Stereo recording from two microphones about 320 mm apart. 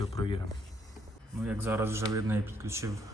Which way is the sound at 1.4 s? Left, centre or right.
Centre.